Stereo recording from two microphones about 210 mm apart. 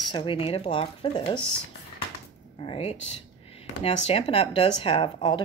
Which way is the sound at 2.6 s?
25° left (ahead or behind).